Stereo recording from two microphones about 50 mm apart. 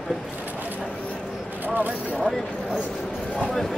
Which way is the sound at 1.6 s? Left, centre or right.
Right.